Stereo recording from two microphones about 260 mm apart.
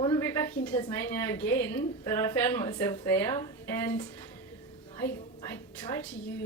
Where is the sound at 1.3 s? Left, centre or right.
Centre.